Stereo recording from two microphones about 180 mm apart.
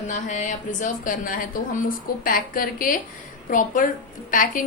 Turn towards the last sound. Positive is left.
turn(degrees=50)  # may be behind; listen again after turning